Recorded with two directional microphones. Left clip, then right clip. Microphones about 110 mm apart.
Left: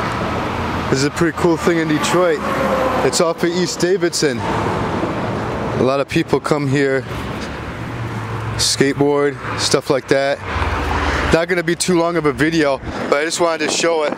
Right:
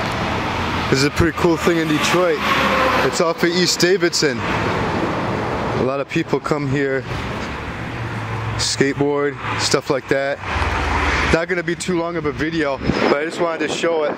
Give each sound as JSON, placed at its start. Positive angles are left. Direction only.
{"t": 0.9, "sound": "speech", "side_deg": 0}
{"t": 2.4, "sound": "speech", "side_deg": -45}
{"t": 3.3, "sound": "speech", "side_deg": 0}
{"t": 5.9, "sound": "speech", "side_deg": 20}
{"t": 8.5, "sound": "speech", "side_deg": 15}
{"t": 10.6, "sound": "vehicle", "side_deg": -5}
{"t": 11.3, "sound": "speech", "side_deg": 15}
{"t": 12.5, "sound": "speech", "side_deg": 25}